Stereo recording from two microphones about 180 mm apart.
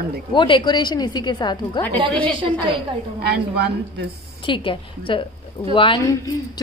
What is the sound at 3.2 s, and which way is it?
Mantra, 65° right (ahead or behind).